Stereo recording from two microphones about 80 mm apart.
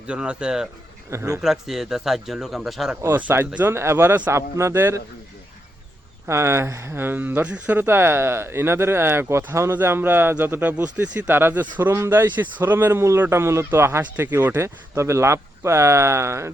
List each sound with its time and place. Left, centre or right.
0.1 s speech: centre
1.1 s speech: right
1.4 s speech: centre
3.2 s speech: right
6.2 s speech: right